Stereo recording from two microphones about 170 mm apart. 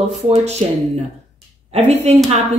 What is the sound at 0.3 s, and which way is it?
Speech, 40° right (ahead or behind).